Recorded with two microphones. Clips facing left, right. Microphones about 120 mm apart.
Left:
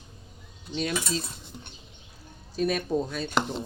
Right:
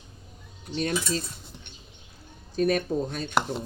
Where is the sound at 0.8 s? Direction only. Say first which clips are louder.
Right 2 dB; 45° right (ahead or behind).